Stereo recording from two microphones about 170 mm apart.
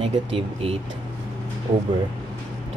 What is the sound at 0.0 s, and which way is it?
Speech, 35° right (ahead or behind).